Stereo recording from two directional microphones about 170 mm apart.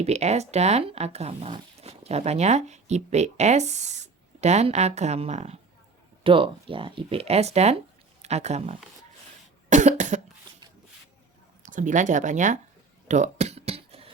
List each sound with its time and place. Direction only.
0.0 s speech: 40° right (ahead or behind)
9.6 s cough: 45° right (ahead or behind)
11.6 s speech: 45° right (ahead or behind)
13.1 s music: 45° right (ahead or behind)